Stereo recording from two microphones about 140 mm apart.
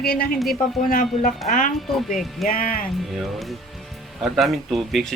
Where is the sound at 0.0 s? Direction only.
90° left.